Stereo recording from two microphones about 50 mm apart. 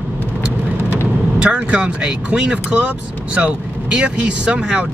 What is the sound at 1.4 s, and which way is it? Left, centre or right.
Speech, right.